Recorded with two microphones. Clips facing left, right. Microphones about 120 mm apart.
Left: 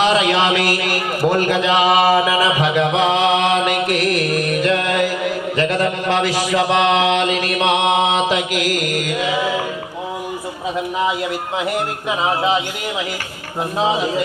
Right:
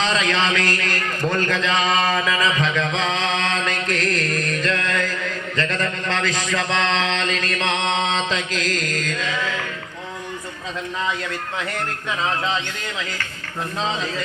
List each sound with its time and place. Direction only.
0.0 s a man's voice: 15° left (ahead or behind)
10.8 s speech: 15° left (ahead or behind)